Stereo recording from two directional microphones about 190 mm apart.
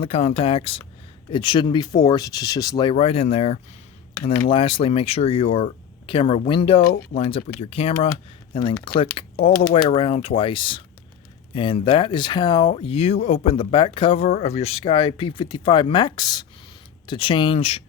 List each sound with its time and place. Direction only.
0.0 s speech: 30° left (ahead or behind)